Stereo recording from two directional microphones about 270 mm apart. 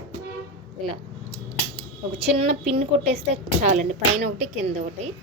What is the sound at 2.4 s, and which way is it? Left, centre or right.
Speech, right.